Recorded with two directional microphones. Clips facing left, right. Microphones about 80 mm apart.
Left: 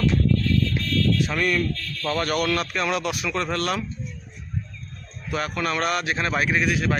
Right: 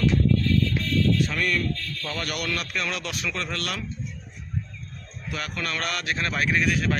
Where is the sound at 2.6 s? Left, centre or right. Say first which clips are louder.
Left 5 dB; left.